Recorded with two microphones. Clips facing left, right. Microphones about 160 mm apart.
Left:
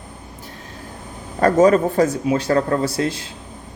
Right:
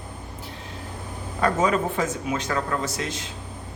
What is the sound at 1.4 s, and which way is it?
Speech, 45° left (ahead or behind).